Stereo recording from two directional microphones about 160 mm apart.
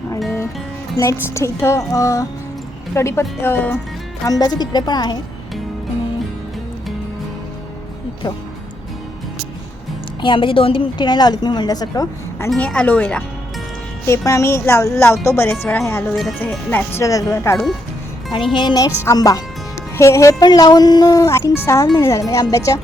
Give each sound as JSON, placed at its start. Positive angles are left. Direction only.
{"t": 0.9, "sound": "a woman's voice", "side_deg": 20}
{"t": 4.2, "sound": "a woman's voice", "side_deg": 25}
{"t": 10.2, "sound": "a woman's voice", "side_deg": 30}
{"t": 12.5, "sound": "speech", "side_deg": 5}
{"t": 14.1, "sound": "a woman's voice", "side_deg": 20}